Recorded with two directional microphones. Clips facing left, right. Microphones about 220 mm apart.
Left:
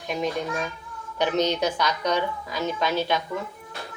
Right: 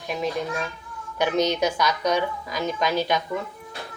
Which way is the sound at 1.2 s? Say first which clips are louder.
Right 1 dB; 10° right (ahead or behind).